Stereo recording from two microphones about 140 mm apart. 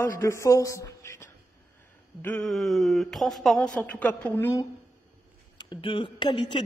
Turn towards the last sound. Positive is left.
turn(degrees=35)  # may be behind; listen again after turning